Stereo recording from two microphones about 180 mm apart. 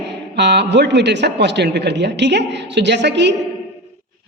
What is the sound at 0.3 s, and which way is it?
Speech, 75° right (ahead or behind).